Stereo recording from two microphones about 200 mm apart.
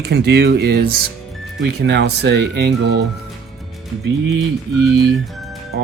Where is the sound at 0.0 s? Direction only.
55° right (ahead or behind).